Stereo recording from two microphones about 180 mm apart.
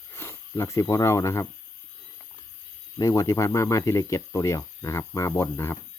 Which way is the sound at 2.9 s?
20° left (ahead or behind).